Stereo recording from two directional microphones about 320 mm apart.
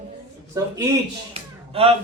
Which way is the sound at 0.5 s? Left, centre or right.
Centre.